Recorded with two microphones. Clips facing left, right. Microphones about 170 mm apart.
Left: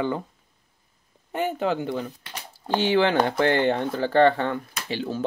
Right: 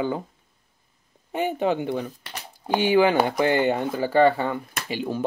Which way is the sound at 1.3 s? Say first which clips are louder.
Right 1 dB; 15° right (ahead or behind).